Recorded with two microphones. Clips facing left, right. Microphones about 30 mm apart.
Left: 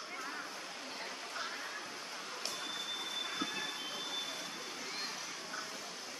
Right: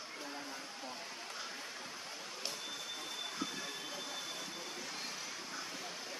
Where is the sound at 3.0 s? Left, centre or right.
Left; by 6.1 s centre.